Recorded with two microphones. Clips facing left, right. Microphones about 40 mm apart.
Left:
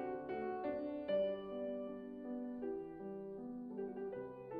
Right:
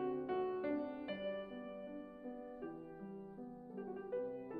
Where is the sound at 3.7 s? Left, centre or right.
Centre.